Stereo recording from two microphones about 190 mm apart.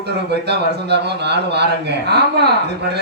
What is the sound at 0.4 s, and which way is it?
Speech, 60° right (ahead or behind).